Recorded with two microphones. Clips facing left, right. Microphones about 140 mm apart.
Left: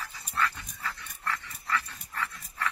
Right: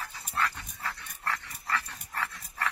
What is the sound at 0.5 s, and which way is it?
Dog, 35° right (ahead or behind).